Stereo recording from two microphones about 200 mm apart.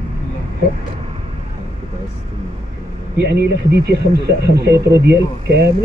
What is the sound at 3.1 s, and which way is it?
Speech, 55° right (ahead or behind).